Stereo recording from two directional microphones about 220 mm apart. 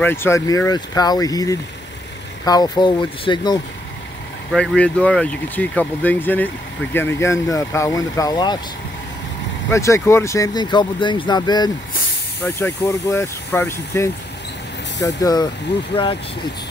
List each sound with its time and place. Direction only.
0.0 s speech: 10° left (ahead or behind)
4.5 s speech: 5° left (ahead or behind)
9.7 s speech: 10° left (ahead or behind)